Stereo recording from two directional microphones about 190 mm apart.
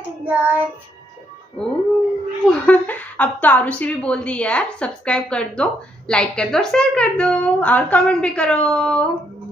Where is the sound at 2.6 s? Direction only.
10° left (ahead or behind).